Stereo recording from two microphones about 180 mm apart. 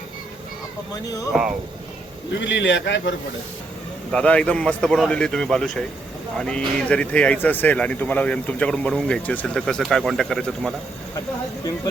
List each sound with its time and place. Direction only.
1.3 s a man's voice: 5° right (ahead or behind)
2.4 s a man's voice: 90° left
4.1 s a man's voice: 5° left (ahead or behind)